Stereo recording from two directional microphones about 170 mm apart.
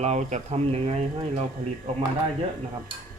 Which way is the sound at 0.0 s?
45° right (ahead or behind).